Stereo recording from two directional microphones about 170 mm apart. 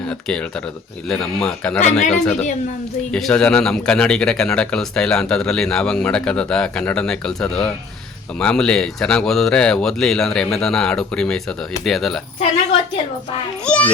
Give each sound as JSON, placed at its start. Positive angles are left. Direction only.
{"t": 0.1, "sound": "speech", "side_deg": 5}
{"t": 1.8, "sound": "speech", "side_deg": 40}
{"t": 2.0, "sound": "speech", "side_deg": 5}
{"t": 13.7, "sound": "a child's voice", "side_deg": 5}